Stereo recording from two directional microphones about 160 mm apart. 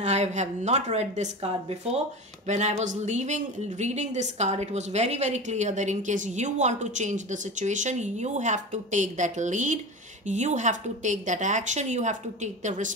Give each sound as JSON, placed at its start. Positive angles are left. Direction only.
{"t": 0.0, "sound": "speech", "side_deg": -45}